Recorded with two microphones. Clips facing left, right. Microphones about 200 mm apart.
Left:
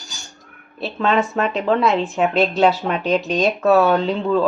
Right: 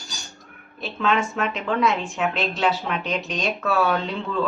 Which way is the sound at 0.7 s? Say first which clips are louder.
Left 4 dB; 35° left (ahead or behind).